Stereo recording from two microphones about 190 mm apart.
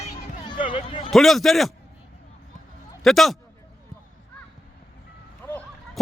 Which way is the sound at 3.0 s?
Centre (ahead or behind).